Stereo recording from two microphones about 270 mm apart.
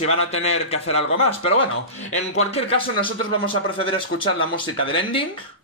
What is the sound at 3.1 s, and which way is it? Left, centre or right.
Speech, right.